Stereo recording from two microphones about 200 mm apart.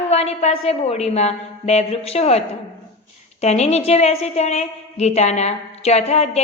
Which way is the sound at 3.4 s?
35° left (ahead or behind).